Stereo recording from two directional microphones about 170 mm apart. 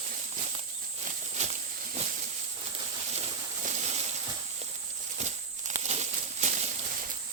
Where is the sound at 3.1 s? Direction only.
40° right (ahead or behind).